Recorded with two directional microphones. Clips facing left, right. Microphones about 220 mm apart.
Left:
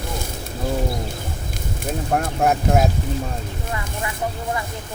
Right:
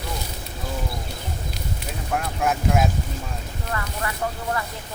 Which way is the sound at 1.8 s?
45° left (ahead or behind).